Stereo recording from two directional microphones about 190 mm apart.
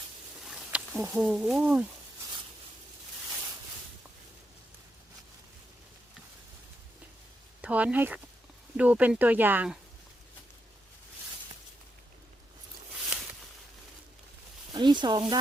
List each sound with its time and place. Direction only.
0.4 s a sound: centre (ahead or behind)
1.0 s speech: 5° right (ahead or behind)
7.6 s speech: 5° right (ahead or behind)
14.7 s speech: 25° right (ahead or behind)